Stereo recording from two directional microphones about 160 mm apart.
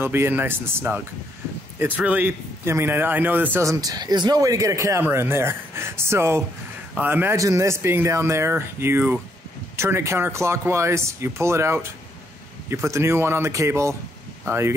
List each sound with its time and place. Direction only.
0.0 s a man's voice: 15° right (ahead or behind)